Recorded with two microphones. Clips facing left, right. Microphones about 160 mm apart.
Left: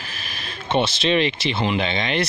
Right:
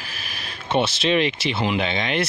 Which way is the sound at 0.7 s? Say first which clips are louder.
Even; 5° right (ahead or behind).